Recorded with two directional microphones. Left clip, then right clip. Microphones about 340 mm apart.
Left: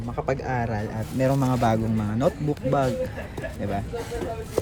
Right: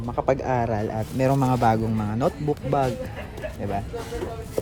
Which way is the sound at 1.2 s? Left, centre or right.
Right.